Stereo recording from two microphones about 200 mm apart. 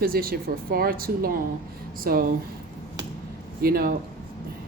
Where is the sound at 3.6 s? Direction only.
50° right (ahead or behind).